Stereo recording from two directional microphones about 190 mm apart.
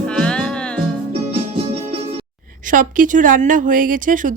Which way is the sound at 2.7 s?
45° right (ahead or behind).